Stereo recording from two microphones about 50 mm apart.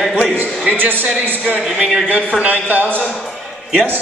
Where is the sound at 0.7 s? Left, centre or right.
Right.